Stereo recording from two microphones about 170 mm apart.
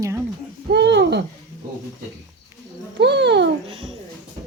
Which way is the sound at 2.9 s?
85° right.